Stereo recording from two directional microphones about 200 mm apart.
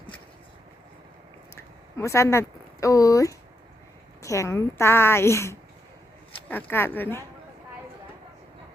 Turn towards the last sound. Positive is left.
turn(degrees=10)  # may be behind; listen again after turning